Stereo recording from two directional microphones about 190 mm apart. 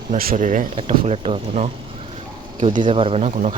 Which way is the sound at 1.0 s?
30° right (ahead or behind).